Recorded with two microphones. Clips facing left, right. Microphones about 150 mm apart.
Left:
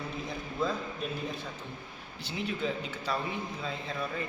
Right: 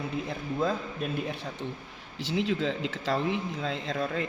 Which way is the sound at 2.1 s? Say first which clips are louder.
Right 7 dB; 90° right.